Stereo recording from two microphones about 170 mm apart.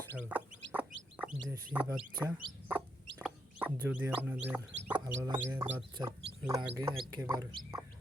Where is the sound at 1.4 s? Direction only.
15° right (ahead or behind).